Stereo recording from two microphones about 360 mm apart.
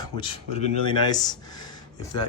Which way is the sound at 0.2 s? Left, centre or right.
Centre.